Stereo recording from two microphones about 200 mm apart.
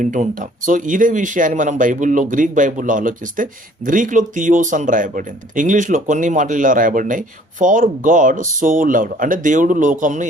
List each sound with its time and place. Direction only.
0.0 s speech: 40° right (ahead or behind)